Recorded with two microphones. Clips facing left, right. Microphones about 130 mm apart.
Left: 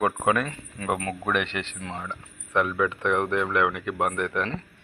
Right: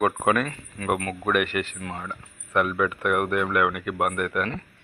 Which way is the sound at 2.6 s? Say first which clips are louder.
Right 1 dB; 15° right (ahead or behind).